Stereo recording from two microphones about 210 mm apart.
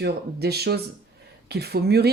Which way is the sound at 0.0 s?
50° right (ahead or behind).